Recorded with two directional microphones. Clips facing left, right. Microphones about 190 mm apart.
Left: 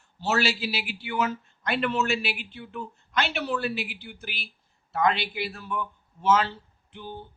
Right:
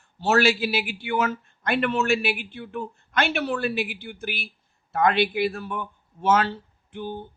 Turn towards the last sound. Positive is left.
turn(degrees=-55)  # may be behind; listen again after turning